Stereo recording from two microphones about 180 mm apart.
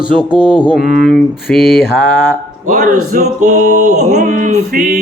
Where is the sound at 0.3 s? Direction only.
25° right (ahead or behind).